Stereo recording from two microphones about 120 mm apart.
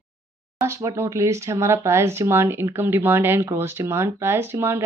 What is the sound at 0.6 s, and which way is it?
Speech, 25° right (ahead or behind).